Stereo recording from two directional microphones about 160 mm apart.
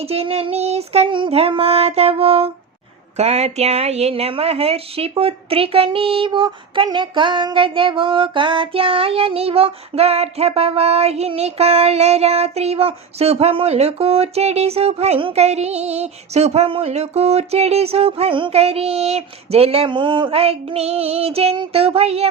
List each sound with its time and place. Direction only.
0.0 s speech: 40° right (ahead or behind)